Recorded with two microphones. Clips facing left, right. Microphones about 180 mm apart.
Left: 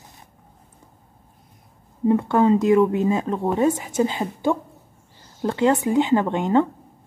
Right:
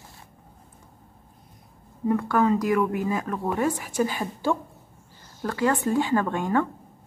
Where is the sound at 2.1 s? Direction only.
25° left (ahead or behind).